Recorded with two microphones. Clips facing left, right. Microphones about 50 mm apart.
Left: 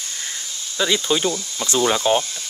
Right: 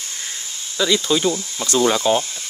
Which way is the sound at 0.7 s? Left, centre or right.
Centre.